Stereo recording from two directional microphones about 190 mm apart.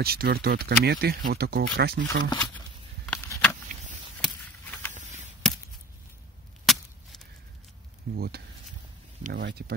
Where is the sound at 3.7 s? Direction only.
40° right (ahead or behind).